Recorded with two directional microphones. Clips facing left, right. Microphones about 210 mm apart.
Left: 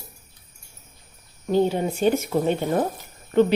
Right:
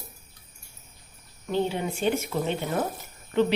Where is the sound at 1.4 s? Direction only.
40° left (ahead or behind).